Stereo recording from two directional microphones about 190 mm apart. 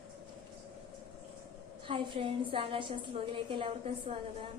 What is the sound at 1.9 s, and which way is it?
A woman's voice, 30° right (ahead or behind).